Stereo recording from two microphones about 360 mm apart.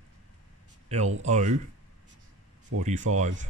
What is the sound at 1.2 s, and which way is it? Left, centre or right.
Speech, centre.